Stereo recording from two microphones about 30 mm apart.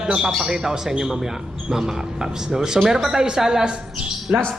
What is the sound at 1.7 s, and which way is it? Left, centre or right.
Speech, centre.